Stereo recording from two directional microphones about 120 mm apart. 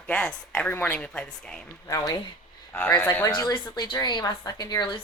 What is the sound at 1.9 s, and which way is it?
Speech, 35° left (ahead or behind).